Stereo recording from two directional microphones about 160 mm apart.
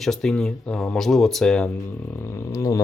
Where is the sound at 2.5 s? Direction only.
20° left (ahead or behind).